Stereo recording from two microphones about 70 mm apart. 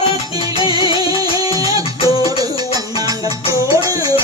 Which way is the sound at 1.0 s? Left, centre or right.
Right.